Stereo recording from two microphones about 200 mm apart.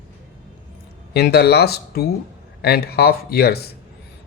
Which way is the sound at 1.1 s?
55° left (ahead or behind).